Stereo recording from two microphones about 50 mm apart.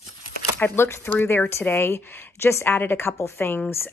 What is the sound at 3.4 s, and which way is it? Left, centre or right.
Speech, left.